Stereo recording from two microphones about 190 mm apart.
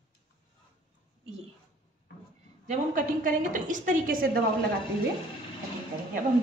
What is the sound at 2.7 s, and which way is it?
A woman's voice, 45° right (ahead or behind).